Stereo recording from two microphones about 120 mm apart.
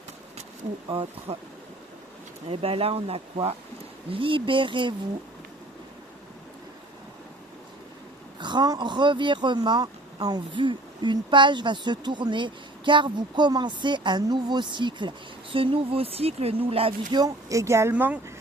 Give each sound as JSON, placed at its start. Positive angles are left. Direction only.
{"t": 0.9, "sound": "speech", "side_deg": -45}
{"t": 2.5, "sound": "speech", "side_deg": -55}
{"t": 8.4, "sound": "speech", "side_deg": -40}
{"t": 17.1, "sound": "speech", "side_deg": -35}
{"t": 17.9, "sound": "speech", "side_deg": -10}